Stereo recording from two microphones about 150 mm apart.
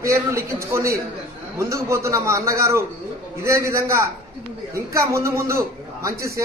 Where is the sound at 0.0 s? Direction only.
20° right (ahead or behind).